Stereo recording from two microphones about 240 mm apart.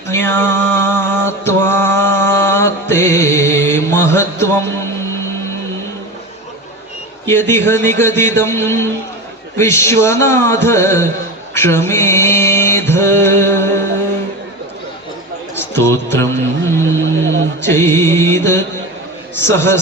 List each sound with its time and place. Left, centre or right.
0.1 s music: centre
7.3 s a man's voice: centre
11.5 s music: centre
15.5 s music: centre
17.0 s music: right
17.7 s a man's voice: centre